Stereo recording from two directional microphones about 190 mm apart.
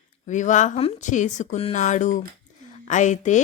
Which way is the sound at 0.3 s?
40° left (ahead or behind).